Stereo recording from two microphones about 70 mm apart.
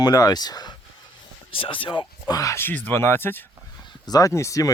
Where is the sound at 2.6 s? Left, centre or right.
Left.